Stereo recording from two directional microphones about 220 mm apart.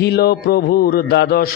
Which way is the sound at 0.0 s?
45° left (ahead or behind).